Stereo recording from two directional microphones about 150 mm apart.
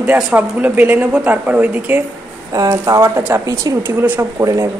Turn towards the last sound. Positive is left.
turn(degrees=-20)  # may be behind; listen again after turning